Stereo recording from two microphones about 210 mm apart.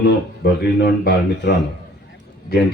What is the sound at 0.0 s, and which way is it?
Speech, 50° left (ahead or behind).